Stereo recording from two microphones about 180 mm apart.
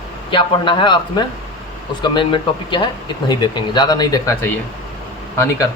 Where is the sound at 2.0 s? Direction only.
25° left (ahead or behind).